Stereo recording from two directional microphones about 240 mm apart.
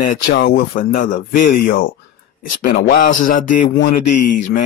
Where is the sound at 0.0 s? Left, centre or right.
Left.